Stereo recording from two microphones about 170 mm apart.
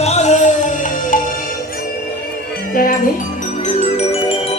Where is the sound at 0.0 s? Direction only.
40° left (ahead or behind).